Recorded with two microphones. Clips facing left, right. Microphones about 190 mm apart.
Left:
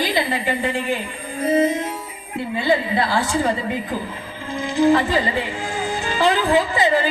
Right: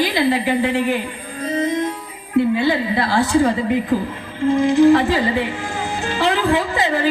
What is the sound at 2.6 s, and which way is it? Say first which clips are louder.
Speech: right 1 dB; 65° right (ahead or behind).